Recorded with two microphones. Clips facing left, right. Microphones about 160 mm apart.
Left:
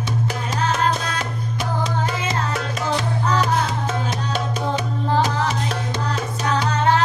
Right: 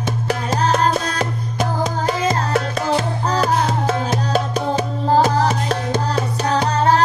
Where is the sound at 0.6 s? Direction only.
40° right (ahead or behind).